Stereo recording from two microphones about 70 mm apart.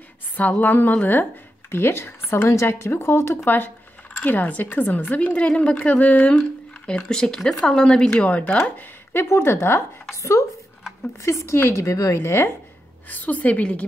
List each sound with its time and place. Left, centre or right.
0.4 s speech: left
3.4 s speech: left
8.6 s speech: left
10.1 s speech: left
13.1 s speech: left